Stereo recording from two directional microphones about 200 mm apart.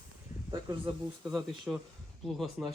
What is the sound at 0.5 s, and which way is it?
Speech, 25° right (ahead or behind).